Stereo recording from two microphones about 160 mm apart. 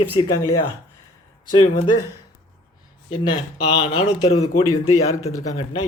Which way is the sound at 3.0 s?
30° left (ahead or behind).